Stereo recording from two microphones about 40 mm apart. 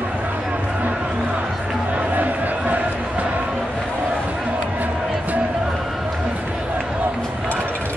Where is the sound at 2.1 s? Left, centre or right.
Right.